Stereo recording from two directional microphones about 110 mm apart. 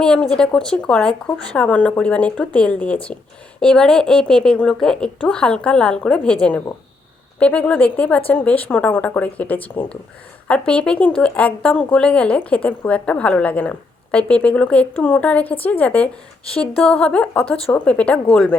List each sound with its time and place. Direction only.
0.0 s speech: 5° left (ahead or behind)